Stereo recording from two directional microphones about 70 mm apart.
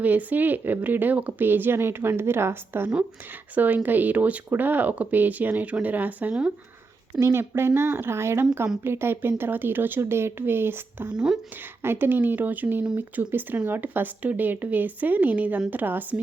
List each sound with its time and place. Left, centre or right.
0.0 s speech: right
3.5 s speech: right
7.2 s speech: right